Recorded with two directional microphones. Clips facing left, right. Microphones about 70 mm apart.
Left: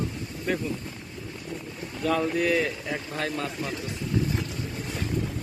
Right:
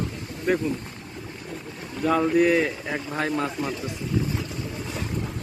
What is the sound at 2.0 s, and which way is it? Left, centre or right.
Speech, centre.